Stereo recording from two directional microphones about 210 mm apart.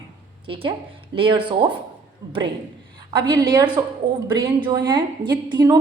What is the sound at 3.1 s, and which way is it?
A woman's voice, 20° right (ahead or behind).